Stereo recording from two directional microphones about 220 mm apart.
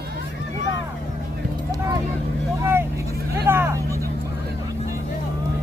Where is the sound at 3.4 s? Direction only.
10° right (ahead or behind).